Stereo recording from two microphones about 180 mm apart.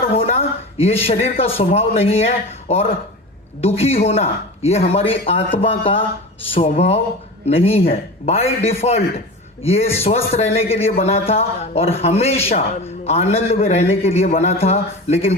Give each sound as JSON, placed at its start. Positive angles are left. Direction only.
{"t": 0.1, "sound": "a man's voice", "side_deg": 35}